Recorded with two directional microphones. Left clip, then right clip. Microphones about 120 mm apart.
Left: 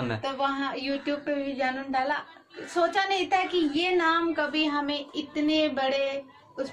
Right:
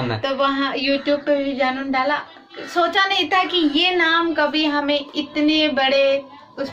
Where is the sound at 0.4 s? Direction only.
15° right (ahead or behind).